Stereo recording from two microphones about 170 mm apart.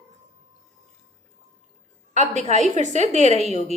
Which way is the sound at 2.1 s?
45° right (ahead or behind).